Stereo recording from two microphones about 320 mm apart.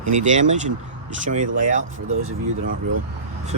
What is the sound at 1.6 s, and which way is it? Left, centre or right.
Speech, right.